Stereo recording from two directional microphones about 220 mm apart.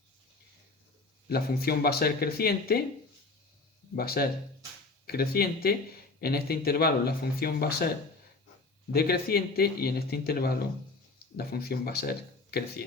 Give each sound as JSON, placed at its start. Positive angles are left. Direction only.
{"t": 1.3, "sound": "speech", "side_deg": 45}
{"t": 3.9, "sound": "speech", "side_deg": 45}
{"t": 8.9, "sound": "speech", "side_deg": 45}